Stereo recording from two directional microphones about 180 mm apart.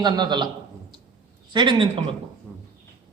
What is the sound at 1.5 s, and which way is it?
Speech, 25° right (ahead or behind).